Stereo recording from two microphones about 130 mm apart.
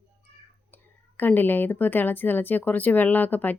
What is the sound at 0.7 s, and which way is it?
Speech, 15° left (ahead or behind).